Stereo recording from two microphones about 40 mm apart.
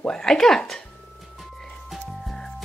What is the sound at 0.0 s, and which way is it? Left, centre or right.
Speech, centre.